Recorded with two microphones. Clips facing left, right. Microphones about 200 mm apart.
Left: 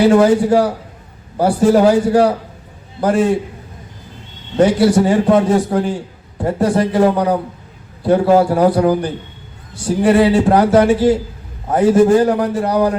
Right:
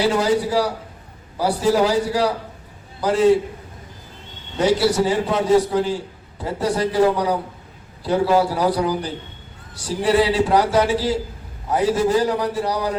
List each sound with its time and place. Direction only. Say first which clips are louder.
0.0 s a man's voice: left 8 dB; 55° left (ahead or behind)
4.5 s a man's voice: left 6 dB; 55° left (ahead or behind)